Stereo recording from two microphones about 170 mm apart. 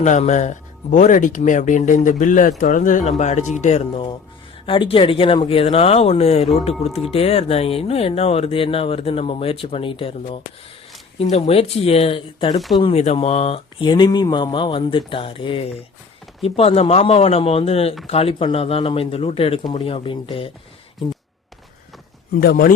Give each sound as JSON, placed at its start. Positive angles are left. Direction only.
{"t": 0.0, "sound": "speech", "side_deg": 45}
{"t": 22.4, "sound": "speech", "side_deg": 60}